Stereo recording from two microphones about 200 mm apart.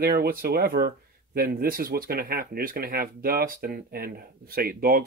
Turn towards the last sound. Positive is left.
turn(degrees=-50)  # may be behind; listen again after turning